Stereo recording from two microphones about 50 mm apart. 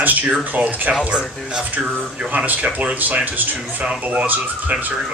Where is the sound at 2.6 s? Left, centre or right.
Right.